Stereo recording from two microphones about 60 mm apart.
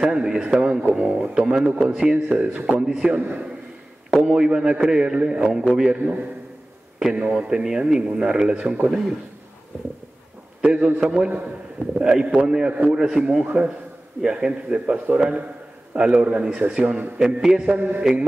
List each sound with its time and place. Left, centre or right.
0.0 s a man's voice: centre
3.2 s a man's voice: right
4.1 s a man's voice: centre
7.2 s a man's voice: right
10.6 s a man's voice: centre
17.6 s a man's voice: right